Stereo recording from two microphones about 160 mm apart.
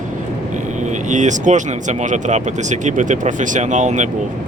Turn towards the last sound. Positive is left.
turn(degrees=-50)  # may be behind; listen again after turning